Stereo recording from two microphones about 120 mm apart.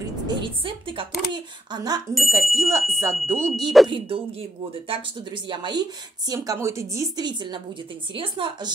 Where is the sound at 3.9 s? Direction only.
50° right (ahead or behind); by 7.2 s 25° right (ahead or behind).